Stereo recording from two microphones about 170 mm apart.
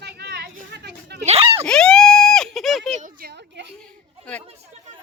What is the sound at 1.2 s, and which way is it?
Speech, 40° right (ahead or behind).